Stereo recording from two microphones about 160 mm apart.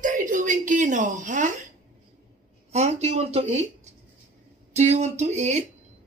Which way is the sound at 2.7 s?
45° right (ahead or behind).